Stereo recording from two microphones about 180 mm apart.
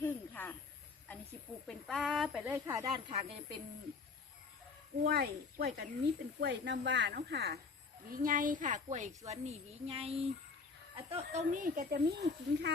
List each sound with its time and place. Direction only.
0.0 s snake: 10° left (ahead or behind)
1.6 s speech: centre (ahead or behind)
2.8 s speech: 30° right (ahead or behind)
5.0 s speech: 60° right (ahead or behind)
6.4 s speech: 75° right (ahead or behind)
8.1 s a woman's voice: 50° right (ahead or behind); by 12.7 s 65° right (ahead or behind)